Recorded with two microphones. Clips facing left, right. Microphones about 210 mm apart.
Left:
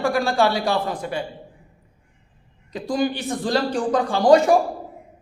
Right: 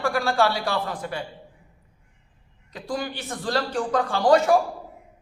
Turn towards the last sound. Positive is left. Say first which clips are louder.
# left 3 dB
turn(degrees=15)  # may be behind; listen again after turning